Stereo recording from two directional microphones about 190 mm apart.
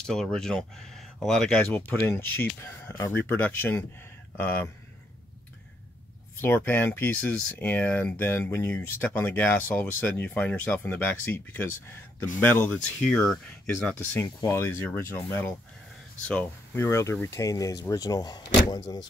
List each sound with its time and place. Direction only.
0.0 s speech: 5° left (ahead or behind)
6.4 s speech: 10° left (ahead or behind)
13.8 s speech: 10° left (ahead or behind)